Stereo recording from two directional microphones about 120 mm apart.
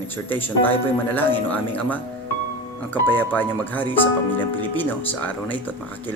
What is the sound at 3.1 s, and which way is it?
Speech, 15° left (ahead or behind).